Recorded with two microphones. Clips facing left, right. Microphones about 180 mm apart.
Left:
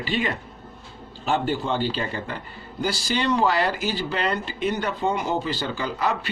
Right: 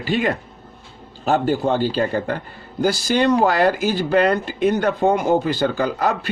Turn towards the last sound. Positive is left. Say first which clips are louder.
# right 5 dB
turn(degrees=-45)  # may be behind; listen again after turning